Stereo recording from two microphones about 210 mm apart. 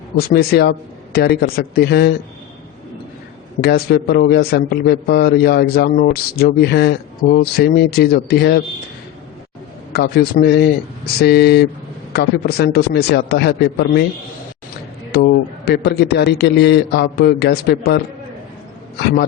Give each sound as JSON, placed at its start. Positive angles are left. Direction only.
{"t": 0.2, "sound": "a man's voice", "side_deg": 50}
{"t": 3.6, "sound": "a man's voice", "side_deg": 50}
{"t": 9.9, "sound": "a man's voice", "side_deg": 45}
{"t": 15.1, "sound": "a man's voice", "side_deg": 50}